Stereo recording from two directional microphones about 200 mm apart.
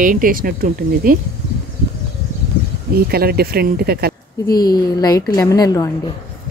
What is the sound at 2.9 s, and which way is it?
Speech, 50° right (ahead or behind).